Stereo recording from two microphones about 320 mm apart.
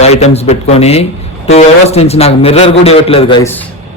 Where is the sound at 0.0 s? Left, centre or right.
Centre.